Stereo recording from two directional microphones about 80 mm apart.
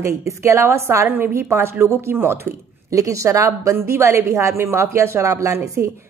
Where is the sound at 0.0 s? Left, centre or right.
Right.